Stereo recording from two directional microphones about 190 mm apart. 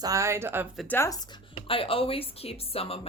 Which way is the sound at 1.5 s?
30° left (ahead or behind).